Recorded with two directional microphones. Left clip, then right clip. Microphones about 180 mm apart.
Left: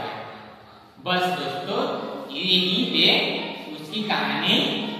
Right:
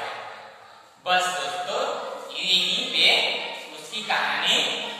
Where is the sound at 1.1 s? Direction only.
10° right (ahead or behind).